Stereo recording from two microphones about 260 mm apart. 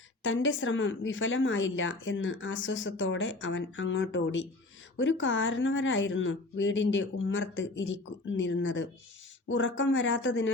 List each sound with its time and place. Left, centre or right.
0.2 s speech: left